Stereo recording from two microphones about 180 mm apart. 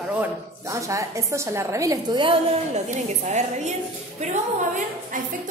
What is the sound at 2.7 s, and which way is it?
A woman's voice, 40° right (ahead or behind).